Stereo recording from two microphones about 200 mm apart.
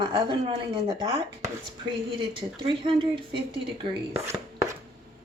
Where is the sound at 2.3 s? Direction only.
25° right (ahead or behind).